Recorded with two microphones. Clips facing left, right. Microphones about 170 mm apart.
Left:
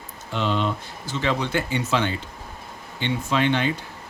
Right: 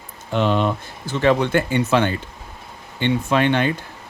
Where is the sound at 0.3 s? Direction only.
55° right (ahead or behind).